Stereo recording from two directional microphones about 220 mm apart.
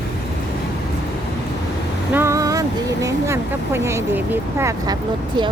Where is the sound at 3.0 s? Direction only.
10° right (ahead or behind).